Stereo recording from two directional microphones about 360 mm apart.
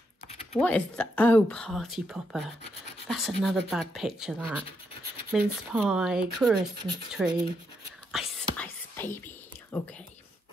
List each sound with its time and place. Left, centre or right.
0.6 s speech: centre
8.1 s whispering: centre